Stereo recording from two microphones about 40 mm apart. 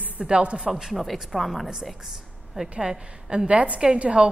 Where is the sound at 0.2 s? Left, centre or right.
Right.